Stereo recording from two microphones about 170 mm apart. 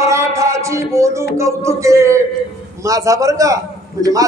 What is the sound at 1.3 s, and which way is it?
A man's voice, 15° right (ahead or behind).